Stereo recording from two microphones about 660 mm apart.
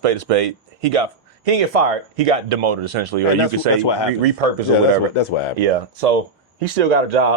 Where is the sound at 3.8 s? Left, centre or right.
Left.